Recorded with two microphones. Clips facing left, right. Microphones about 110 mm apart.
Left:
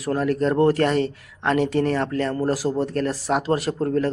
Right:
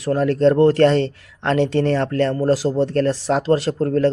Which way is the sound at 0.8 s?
30° right (ahead or behind).